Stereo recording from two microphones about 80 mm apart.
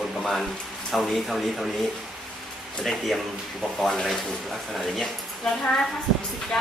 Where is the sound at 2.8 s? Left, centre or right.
Centre.